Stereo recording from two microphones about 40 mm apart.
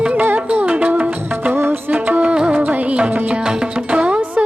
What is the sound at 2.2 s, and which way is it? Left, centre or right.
Music, right.